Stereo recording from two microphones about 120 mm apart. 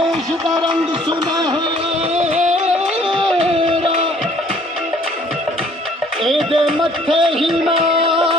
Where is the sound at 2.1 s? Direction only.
65° right (ahead or behind).